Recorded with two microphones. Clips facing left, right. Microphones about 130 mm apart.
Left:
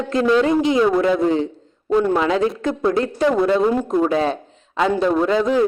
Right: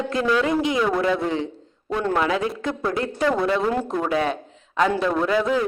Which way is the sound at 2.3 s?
25° left (ahead or behind).